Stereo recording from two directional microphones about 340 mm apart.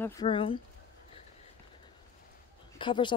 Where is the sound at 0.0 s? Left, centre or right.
Centre.